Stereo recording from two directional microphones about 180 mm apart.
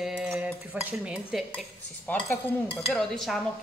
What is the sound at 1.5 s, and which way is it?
Dishes, 5° left (ahead or behind).